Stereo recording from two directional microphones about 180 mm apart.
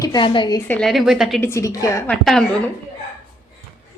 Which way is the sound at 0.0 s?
25° left (ahead or behind).